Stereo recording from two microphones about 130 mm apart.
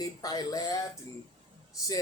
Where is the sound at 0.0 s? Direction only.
30° left (ahead or behind).